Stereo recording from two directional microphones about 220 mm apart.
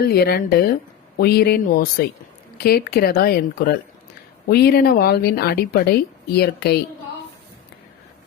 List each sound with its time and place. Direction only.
0.0 s speech: 45° left (ahead or behind)